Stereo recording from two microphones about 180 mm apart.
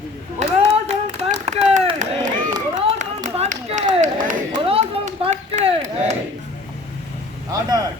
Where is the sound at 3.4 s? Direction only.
40° right (ahead or behind).